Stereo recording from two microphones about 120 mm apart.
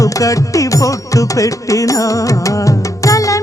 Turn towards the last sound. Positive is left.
turn(degrees=25)  # may be behind; listen again after turning